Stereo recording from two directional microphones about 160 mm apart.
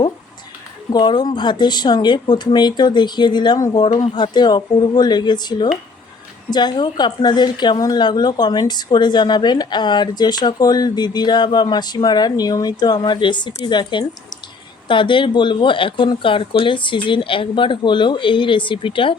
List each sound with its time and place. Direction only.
0.9 s a woman's voice: 25° left (ahead or behind)